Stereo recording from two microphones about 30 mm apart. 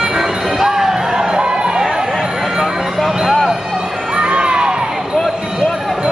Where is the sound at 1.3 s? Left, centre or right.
Right.